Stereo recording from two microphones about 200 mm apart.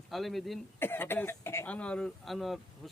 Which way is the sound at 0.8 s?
10° left (ahead or behind).